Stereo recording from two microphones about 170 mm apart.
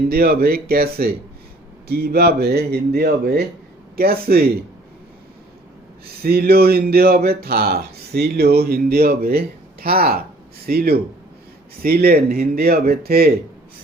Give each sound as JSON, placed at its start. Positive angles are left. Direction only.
{"t": 0.1, "sound": "speech", "side_deg": -65}
{"t": 6.2, "sound": "speech", "side_deg": -65}